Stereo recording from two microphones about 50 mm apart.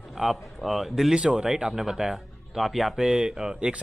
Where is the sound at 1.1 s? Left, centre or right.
Right.